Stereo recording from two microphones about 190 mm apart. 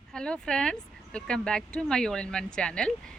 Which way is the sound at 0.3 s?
5° left (ahead or behind).